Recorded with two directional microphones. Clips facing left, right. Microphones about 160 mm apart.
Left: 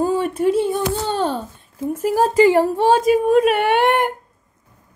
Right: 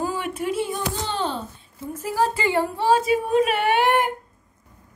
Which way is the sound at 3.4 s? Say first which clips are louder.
Left 4 dB; 50° left (ahead or behind).